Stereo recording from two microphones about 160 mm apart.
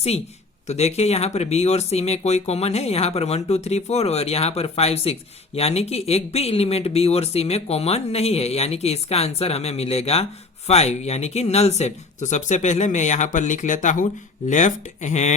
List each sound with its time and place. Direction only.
0.7 s speech: 40° left (ahead or behind)